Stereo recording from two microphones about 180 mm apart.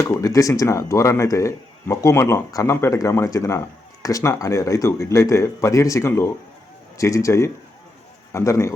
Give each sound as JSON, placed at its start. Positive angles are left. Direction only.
{"t": 0.0, "sound": "a man's voice", "side_deg": 15}